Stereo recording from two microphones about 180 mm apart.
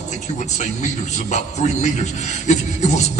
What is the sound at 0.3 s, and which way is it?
A man's voice, 40° left (ahead or behind).